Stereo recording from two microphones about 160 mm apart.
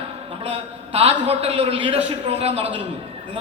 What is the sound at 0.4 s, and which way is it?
A man's voice, 40° right (ahead or behind).